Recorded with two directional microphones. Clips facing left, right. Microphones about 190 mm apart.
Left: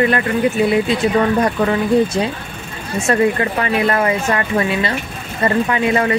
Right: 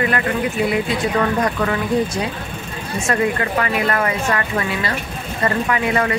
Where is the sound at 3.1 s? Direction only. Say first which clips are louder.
Left 4 dB; 30° left (ahead or behind).